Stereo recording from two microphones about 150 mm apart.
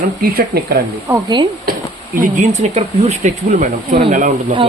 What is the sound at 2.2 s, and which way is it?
Speech, 55° right (ahead or behind).